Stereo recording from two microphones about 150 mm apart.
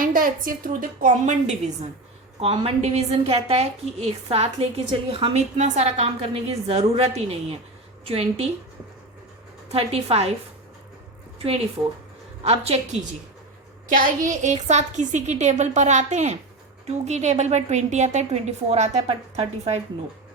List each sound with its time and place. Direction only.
0.0 s a woman's voice: 70° right (ahead or behind); by 1.9 s 50° right (ahead or behind)
2.4 s a woman's voice: 40° right (ahead or behind)
9.6 s a woman's voice: 40° right (ahead or behind)
11.3 s a woman's voice: 40° right (ahead or behind)
13.9 s a woman's voice: 60° right (ahead or behind); by 19.8 s 40° right (ahead or behind)